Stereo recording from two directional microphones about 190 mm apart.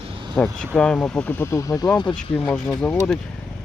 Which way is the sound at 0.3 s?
5° left (ahead or behind).